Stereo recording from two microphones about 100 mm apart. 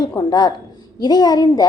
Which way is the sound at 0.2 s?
40° left (ahead or behind).